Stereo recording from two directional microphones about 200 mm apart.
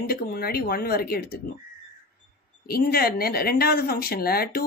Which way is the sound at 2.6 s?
50° left (ahead or behind).